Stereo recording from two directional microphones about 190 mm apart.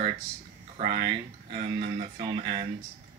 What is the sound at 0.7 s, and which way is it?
Speech, 25° right (ahead or behind).